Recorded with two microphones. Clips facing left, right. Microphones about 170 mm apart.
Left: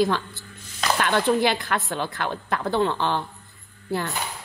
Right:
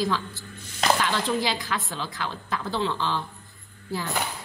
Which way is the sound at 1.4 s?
60° left (ahead or behind).